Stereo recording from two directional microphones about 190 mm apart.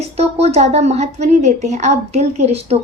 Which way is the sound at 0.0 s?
35° right (ahead or behind).